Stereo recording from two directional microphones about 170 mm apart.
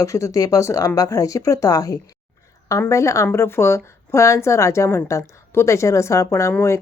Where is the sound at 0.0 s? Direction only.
20° left (ahead or behind).